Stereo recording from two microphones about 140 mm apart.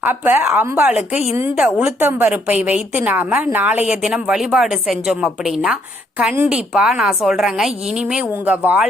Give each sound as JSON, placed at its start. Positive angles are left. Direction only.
{"t": 0.0, "sound": "a woman's voice", "side_deg": -15}
{"t": 1.1, "sound": "a woman's voice", "side_deg": 50}
{"t": 1.5, "sound": "a woman's voice", "side_deg": -5}